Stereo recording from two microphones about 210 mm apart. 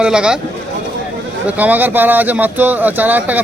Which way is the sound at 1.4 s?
10° right (ahead or behind).